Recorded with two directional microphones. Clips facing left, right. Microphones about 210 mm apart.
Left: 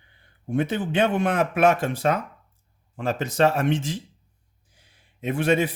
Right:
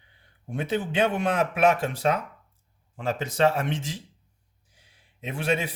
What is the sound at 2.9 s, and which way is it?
Speech, 45° left (ahead or behind).